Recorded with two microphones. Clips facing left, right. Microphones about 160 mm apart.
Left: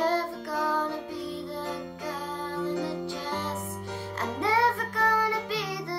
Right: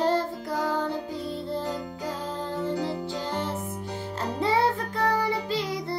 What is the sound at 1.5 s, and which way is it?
Music, 30° right (ahead or behind).